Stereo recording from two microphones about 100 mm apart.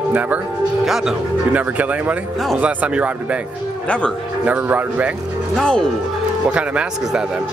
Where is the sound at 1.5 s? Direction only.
15° right (ahead or behind).